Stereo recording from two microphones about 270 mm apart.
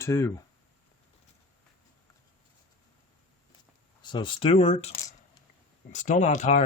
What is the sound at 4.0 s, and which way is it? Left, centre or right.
Speech, centre.